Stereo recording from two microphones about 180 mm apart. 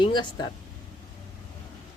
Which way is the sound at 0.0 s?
25° left (ahead or behind).